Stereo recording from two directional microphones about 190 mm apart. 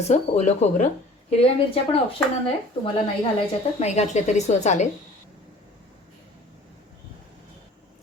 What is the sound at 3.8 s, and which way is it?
A woman's voice, 35° left (ahead or behind).